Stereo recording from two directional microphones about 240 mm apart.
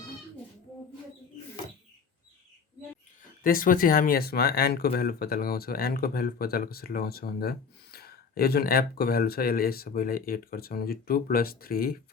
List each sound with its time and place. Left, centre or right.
3.4 s speech: left